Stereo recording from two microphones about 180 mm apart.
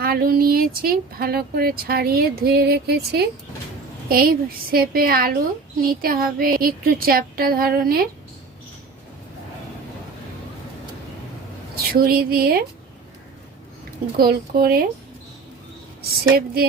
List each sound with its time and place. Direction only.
0.0 s speech: 55° right (ahead or behind)
5.9 s a sound: 55° right (ahead or behind)
11.7 s a woman's voice: 55° right (ahead or behind)
14.2 s speech: 55° right (ahead or behind)
16.0 s speech: 55° right (ahead or behind)